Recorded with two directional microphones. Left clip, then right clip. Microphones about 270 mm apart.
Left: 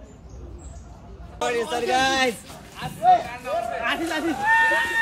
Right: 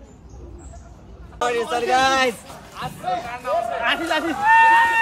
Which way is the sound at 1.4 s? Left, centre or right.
Centre.